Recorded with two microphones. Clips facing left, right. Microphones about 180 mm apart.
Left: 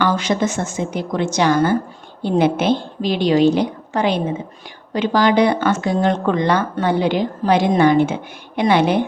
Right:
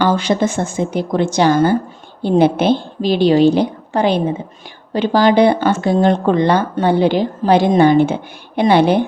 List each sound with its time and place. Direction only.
0.0 s speech: 30° right (ahead or behind)